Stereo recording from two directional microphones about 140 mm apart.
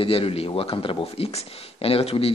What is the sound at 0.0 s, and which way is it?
Speech, 40° left (ahead or behind).